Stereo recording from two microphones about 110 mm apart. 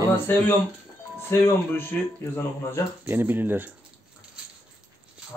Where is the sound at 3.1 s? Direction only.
20° right (ahead or behind).